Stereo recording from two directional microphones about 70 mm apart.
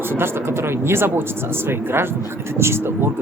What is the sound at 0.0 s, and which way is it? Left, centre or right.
Speech, right.